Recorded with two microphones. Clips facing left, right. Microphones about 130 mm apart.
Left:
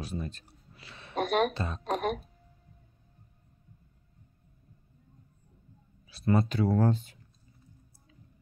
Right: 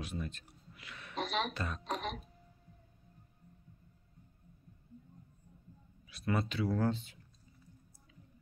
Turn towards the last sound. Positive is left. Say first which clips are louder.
# left 6 dB
turn(degrees=45)  # may be behind; listen again after turning